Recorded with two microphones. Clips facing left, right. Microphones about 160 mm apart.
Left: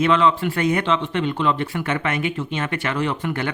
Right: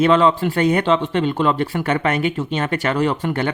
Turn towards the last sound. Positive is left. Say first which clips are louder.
# right 4 dB
turn(degrees=-35)  # may be behind; listen again after turning